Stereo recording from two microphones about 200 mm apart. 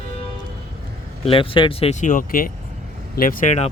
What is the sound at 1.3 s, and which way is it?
Speech, 25° left (ahead or behind).